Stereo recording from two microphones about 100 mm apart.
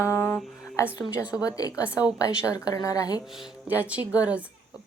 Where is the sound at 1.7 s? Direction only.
10° right (ahead or behind).